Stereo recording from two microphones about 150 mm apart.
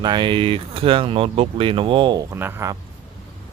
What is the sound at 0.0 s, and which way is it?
Speech, 30° right (ahead or behind).